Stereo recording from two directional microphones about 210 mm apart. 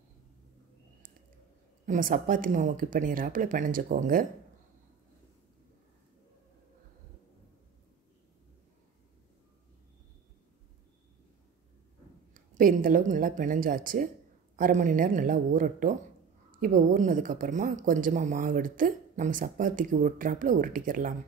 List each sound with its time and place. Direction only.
1.9 s speech: 40° right (ahead or behind)
12.4 s speech: 40° right (ahead or behind)